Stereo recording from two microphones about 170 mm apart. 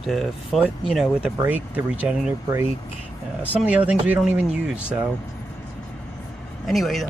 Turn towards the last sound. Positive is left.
turn(degrees=0)  # may be behind; listen again after turning